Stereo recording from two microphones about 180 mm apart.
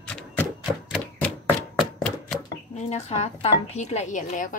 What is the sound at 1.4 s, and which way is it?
Chopping, centre (ahead or behind).